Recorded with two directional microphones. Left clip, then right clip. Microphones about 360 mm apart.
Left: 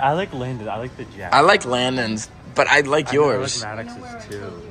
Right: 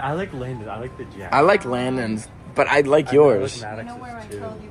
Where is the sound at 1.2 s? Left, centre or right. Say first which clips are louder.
Left 2 dB; centre.